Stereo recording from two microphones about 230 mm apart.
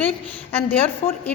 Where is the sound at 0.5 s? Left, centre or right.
Centre.